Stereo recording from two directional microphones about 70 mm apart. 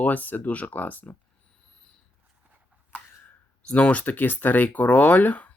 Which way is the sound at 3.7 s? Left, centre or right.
Centre.